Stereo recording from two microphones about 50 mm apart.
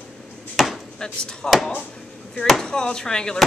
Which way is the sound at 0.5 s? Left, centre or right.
Centre.